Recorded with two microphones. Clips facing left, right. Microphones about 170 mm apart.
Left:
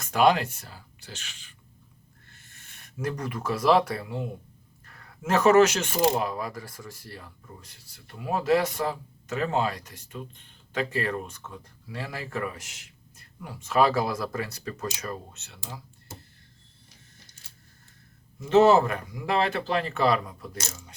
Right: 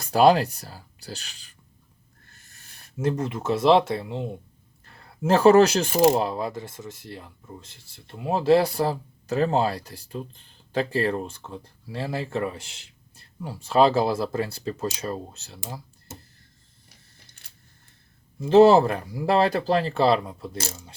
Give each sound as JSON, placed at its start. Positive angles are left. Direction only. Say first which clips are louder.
{"t": 0.0, "sound": "speech", "louder": "right 4 dB", "side_deg": -35}
{"t": 6.1, "sound": "speech", "louder": "right 4 dB", "side_deg": -30}
{"t": 18.3, "sound": "speech", "louder": "right 4 dB", "side_deg": -35}